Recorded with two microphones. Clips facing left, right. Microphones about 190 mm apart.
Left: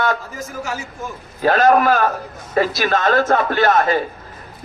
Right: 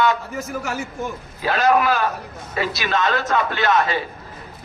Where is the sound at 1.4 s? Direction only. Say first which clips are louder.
Left 4 dB; 45° left (ahead or behind).